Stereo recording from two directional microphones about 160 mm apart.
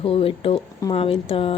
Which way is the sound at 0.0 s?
35° left (ahead or behind).